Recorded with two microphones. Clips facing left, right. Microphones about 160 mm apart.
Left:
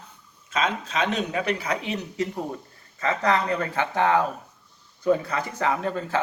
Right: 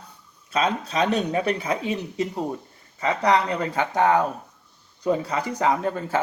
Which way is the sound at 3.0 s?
15° right (ahead or behind).